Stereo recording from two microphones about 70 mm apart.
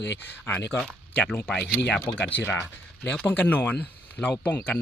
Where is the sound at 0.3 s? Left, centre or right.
Left.